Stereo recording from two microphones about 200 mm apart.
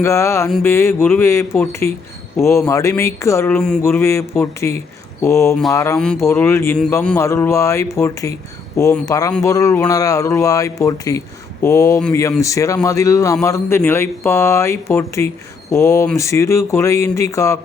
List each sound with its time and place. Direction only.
0.0 s a man's voice: 15° left (ahead or behind)